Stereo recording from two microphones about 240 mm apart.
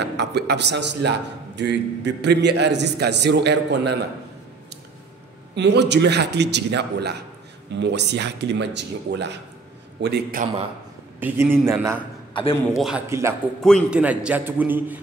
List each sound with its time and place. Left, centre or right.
0.0 s a man's voice: right
5.5 s a man's voice: right
11.1 s a man's voice: centre